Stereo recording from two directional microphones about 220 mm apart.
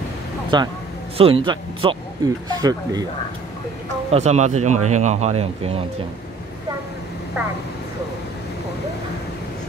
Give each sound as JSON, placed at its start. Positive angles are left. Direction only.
{"t": 0.5, "sound": "speech", "side_deg": -20}
{"t": 4.1, "sound": "speech", "side_deg": -30}